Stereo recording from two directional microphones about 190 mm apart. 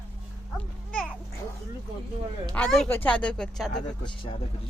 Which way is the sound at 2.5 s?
5° left (ahead or behind).